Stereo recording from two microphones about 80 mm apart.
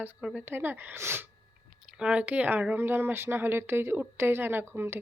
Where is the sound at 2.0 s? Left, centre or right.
Centre.